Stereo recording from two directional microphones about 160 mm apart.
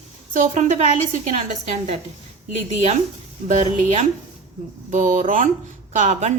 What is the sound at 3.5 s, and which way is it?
A woman's voice, 50° right (ahead or behind).